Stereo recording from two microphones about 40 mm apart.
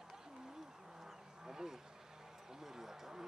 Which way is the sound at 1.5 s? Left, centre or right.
Centre.